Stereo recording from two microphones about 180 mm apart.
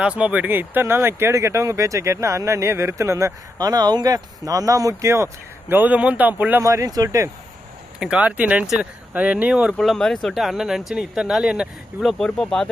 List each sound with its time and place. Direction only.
0.2 s speech: 10° right (ahead or behind)
7.9 s speech: 5° right (ahead or behind)